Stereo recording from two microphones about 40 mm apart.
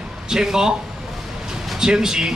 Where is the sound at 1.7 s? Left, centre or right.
Centre.